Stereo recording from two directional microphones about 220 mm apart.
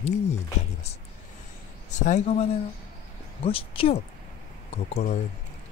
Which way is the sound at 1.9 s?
30° left (ahead or behind).